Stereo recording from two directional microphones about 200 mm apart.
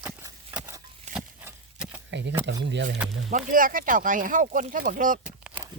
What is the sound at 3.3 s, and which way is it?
Speech, 45° right (ahead or behind).